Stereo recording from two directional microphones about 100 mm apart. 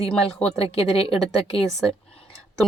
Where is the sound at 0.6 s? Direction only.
75° left (ahead or behind).